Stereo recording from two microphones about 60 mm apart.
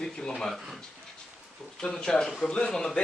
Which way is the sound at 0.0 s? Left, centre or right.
Centre.